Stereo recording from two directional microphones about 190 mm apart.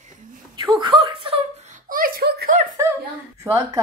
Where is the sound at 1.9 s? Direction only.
50° right (ahead or behind).